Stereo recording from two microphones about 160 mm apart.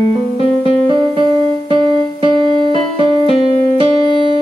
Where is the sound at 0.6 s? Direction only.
35° right (ahead or behind).